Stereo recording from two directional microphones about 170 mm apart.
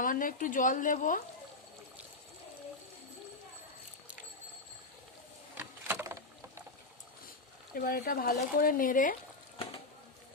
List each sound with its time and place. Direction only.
0.0 s speech: 55° left (ahead or behind)
5.5 s a sound: 15° right (ahead or behind)
7.7 s speech: 55° left (ahead or behind)